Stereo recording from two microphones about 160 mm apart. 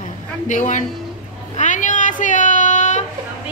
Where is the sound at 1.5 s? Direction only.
50° left (ahead or behind).